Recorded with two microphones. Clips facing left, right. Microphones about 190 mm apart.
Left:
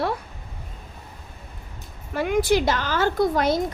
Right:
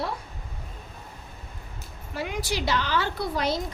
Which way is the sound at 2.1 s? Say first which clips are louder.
Left 10 dB; 55° left (ahead or behind).